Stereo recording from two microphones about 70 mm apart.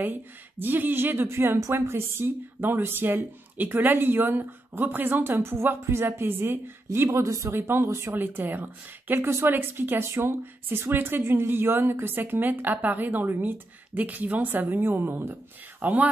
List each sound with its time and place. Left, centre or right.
0.0 s speech: right
7.1 s speech: right